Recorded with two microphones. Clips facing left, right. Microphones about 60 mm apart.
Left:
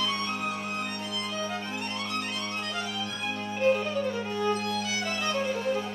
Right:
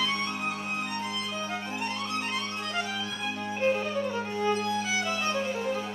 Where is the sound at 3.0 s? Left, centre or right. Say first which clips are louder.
Even; right.